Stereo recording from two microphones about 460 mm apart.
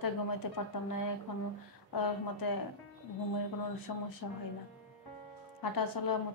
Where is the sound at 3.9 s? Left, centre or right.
Left.